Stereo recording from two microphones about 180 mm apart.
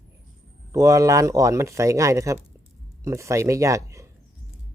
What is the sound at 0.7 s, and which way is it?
Speech, 20° right (ahead or behind).